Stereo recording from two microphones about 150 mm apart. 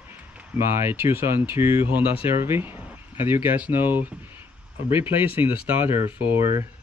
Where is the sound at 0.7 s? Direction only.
15° right (ahead or behind).